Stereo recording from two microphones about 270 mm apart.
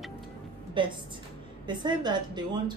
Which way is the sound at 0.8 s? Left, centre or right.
Centre.